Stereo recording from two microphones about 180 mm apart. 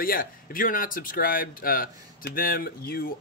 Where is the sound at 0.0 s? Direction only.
50° left (ahead or behind).